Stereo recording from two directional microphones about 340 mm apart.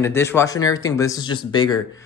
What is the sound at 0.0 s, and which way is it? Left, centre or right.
Speech, centre.